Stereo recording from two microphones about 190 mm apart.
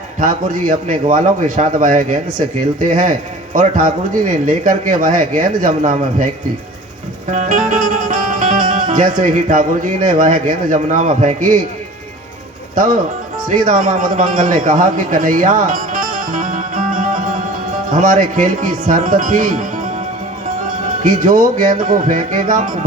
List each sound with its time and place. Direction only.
0.2 s speech: 45° right (ahead or behind)
7.3 s speech: 40° right (ahead or behind)
12.7 s a man's voice: 45° right (ahead or behind)
21.0 s speech: 45° right (ahead or behind)